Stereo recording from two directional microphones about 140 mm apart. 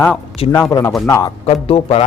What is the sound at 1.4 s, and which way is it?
Speech, 45° left (ahead or behind).